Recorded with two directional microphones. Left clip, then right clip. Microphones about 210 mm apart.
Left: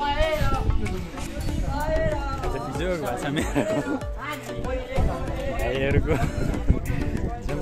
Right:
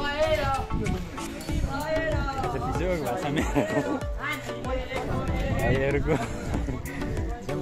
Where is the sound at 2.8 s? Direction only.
Centre (ahead or behind).